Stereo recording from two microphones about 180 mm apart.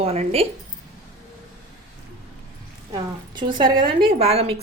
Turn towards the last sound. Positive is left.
turn(degrees=-35)  # may be behind; listen again after turning